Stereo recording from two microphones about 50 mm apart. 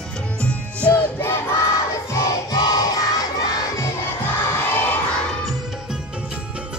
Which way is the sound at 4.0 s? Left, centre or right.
Left.